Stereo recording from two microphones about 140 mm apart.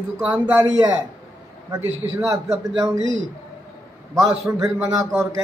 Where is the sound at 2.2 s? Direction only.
25° right (ahead or behind).